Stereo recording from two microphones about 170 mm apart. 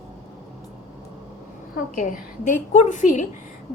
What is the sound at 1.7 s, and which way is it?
A woman's voice, 50° left (ahead or behind).